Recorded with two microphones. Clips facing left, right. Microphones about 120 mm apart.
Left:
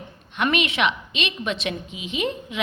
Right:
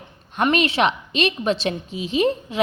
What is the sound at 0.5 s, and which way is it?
A woman's voice, 35° right (ahead or behind).